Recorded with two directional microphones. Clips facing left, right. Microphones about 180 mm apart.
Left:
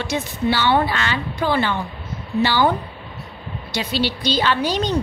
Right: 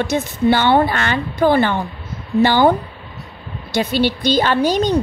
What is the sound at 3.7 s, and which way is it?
A woman's voice, 50° right (ahead or behind).